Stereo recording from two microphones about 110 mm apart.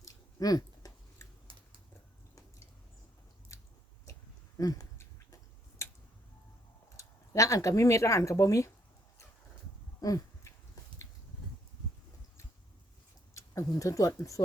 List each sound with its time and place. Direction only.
0.0 s chewing: 35° left (ahead or behind)
1.5 s typing: 55° right (ahead or behind)
3.5 s biting: 30° left (ahead or behind)
4.5 s a sound: 30° left (ahead or behind)
6.9 s speech: 30° left (ahead or behind)
10.0 s a sound: 30° left (ahead or behind)
13.3 s speech: 30° left (ahead or behind)